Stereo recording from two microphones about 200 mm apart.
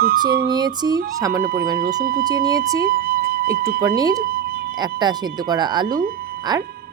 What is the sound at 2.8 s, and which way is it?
Music, 50° right (ahead or behind).